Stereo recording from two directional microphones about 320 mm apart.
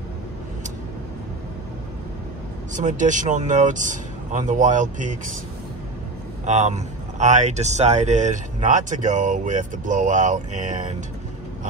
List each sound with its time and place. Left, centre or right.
2.7 s speech: right
6.4 s speech: right